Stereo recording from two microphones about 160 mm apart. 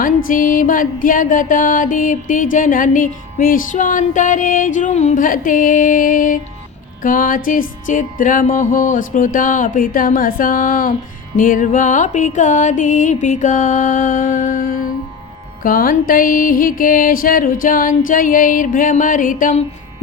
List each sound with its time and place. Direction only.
0.0 s music: 60° left (ahead or behind)